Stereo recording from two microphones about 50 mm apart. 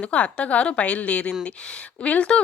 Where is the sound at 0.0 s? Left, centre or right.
Left.